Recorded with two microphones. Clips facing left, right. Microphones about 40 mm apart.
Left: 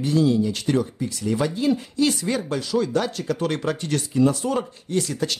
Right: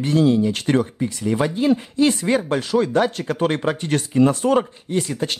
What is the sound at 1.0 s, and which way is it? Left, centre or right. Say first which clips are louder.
A man's voice: right 3 dB; right.